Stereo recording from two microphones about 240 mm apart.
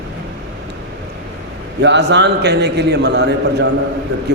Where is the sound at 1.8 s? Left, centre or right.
Right.